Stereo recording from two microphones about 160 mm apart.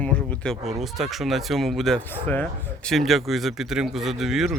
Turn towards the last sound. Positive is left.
turn(degrees=0)  # may be behind; listen again after turning